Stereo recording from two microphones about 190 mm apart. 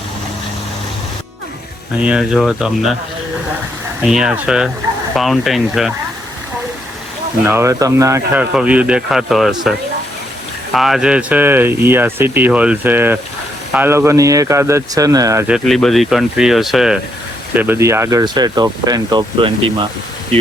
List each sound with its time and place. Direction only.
2.0 s speech: 5° right (ahead or behind)
4.0 s speech: 5° right (ahead or behind)
7.4 s speech: 15° right (ahead or behind)
15.4 s speech: centre (ahead or behind); by 19.7 s 25° right (ahead or behind)